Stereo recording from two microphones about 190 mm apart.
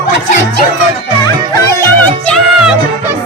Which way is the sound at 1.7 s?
15° left (ahead or behind).